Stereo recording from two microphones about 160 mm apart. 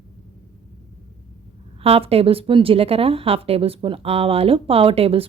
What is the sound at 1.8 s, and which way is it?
Speech, 35° right (ahead or behind).